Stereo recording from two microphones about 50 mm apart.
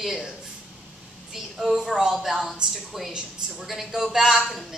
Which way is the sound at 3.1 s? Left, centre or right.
Centre.